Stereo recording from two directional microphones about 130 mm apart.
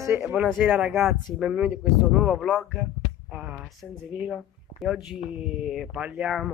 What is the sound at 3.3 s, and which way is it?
Speech, 10° right (ahead or behind).